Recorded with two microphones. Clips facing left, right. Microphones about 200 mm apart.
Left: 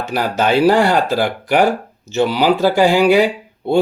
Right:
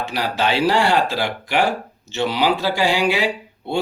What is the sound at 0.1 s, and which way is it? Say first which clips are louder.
Speech: left 7 dB; 50° left (ahead or behind).